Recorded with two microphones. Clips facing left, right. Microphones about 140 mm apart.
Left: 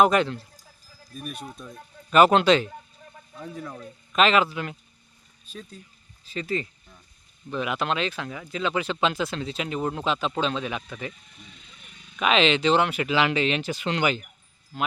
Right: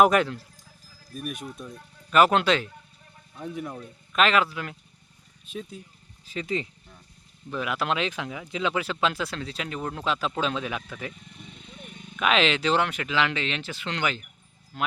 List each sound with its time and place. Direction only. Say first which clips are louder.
0.0 s speech: even; 5° right (ahead or behind)
3.3 s speech: right 2 dB; 20° right (ahead or behind)
4.1 s speech: left 2 dB; centre (ahead or behind)
5.5 s speech: right 5 dB; 10° right (ahead or behind)
7.5 s speech: left 1 dB; centre (ahead or behind)
11.1 s vehicle: right 4 dB; 60° right (ahead or behind)
12.2 s speech: left 2 dB; centre (ahead or behind)
14.7 s speech: left 1 dB; centre (ahead or behind)